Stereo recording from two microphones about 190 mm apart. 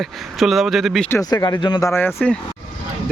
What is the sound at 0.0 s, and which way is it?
Speech, centre (ahead or behind).